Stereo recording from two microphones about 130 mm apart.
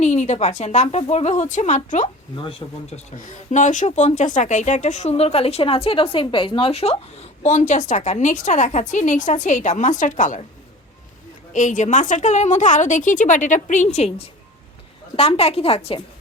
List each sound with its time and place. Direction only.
0.0 s speech: 60° left (ahead or behind)
2.3 s speech: 40° left (ahead or behind)
2.9 s speech: 75° left (ahead or behind)
11.5 s a woman's voice: 75° left (ahead or behind); by 16.0 s 50° left (ahead or behind)